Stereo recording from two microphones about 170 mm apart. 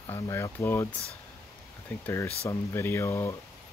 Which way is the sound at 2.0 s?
15° left (ahead or behind).